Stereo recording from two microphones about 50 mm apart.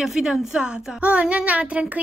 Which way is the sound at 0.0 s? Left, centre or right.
Centre.